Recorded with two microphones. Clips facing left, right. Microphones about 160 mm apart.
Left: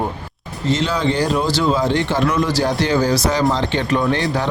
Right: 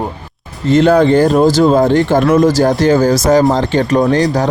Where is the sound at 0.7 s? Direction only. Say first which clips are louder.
Right 10 dB; 55° right (ahead or behind).